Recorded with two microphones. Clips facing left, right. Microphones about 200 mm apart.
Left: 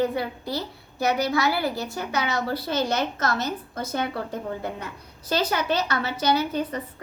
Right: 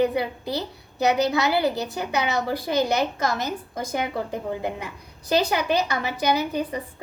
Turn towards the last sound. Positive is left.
turn(degrees=-15)  # may be behind; listen again after turning